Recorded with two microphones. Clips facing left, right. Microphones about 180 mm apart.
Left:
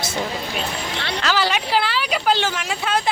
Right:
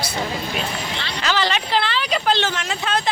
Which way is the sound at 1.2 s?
5° left (ahead or behind).